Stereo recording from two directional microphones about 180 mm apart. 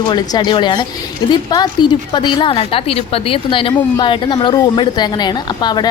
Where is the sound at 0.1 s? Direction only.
25° left (ahead or behind).